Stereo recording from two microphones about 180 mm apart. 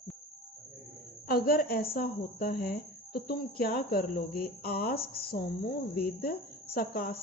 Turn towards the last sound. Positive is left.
turn(degrees=60)  # may be behind; listen again after turning